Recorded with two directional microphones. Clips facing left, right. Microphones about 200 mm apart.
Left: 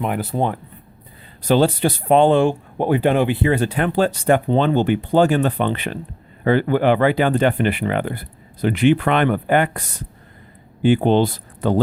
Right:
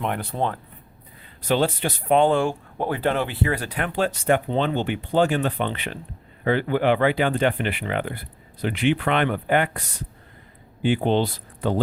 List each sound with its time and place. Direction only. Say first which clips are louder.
0.0 s speech: left 5 dB; 5° left (ahead or behind)
1.4 s speech: left 6 dB; 35° left (ahead or behind)
10.8 s speech: left 5 dB; 45° left (ahead or behind)